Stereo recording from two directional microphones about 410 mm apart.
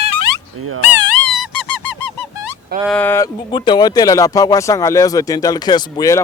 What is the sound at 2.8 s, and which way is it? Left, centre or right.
Speech, centre.